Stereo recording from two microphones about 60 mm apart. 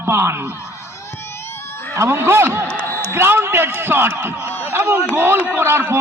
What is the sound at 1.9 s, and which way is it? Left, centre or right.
Speech, right.